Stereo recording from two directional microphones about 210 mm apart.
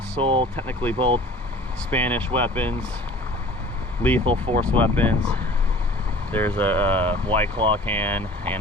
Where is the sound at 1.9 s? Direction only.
10° left (ahead or behind).